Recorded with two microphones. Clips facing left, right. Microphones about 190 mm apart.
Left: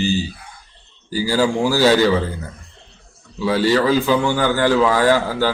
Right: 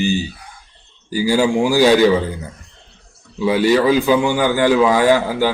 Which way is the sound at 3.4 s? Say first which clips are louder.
Right 2 dB; 15° right (ahead or behind).